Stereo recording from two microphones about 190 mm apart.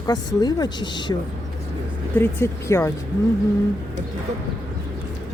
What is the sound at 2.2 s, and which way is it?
Speech, 15° left (ahead or behind).